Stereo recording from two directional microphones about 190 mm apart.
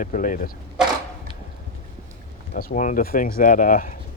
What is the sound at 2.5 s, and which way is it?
Speech, 40° left (ahead or behind).